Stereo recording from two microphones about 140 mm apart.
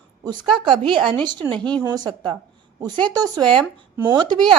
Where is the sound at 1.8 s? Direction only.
30° right (ahead or behind).